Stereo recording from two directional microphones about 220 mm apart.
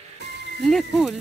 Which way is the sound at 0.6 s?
Centre (ahead or behind).